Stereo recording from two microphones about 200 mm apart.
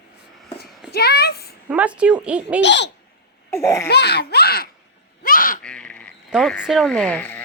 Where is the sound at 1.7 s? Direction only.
5° right (ahead or behind).